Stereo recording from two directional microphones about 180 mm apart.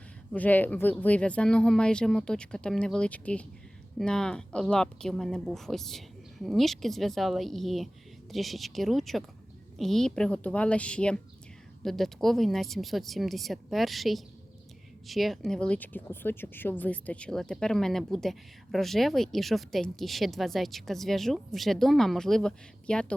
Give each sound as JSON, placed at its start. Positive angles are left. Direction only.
{"t": 0.3, "sound": "speech", "side_deg": 10}